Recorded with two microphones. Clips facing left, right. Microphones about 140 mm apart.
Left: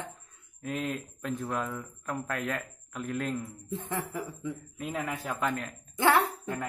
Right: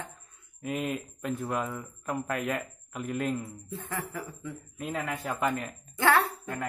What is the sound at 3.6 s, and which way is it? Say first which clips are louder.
Speech: left 2 dB; 25° left (ahead or behind).